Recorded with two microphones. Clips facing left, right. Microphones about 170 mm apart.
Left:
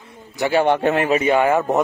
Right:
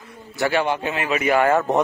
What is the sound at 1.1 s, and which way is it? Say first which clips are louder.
Speech: right 1 dB; 25° left (ahead or behind).